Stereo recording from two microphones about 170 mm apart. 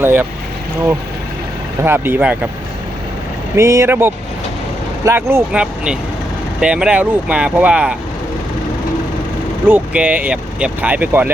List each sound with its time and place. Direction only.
0.0 s speech: 15° right (ahead or behind)
1.8 s speech: 15° right (ahead or behind)
3.5 s speech: 15° right (ahead or behind)
5.5 s speech: 5° right (ahead or behind)
9.6 s speech: 10° right (ahead or behind)